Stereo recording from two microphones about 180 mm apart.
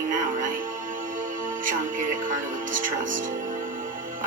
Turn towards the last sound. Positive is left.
turn(degrees=-50)  # may be behind; listen again after turning